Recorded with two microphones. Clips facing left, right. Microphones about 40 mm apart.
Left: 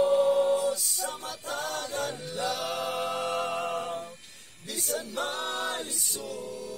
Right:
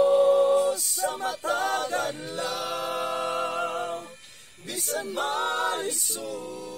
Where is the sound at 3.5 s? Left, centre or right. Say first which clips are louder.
Right 2 dB; right.